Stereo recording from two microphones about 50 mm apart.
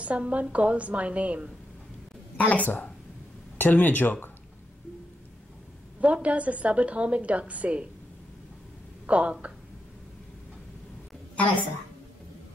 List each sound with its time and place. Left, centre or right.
0.0 s a woman's voice: right
2.3 s speech: left
5.9 s a woman's voice: right
9.0 s a woman's voice: right
11.3 s a woman's voice: left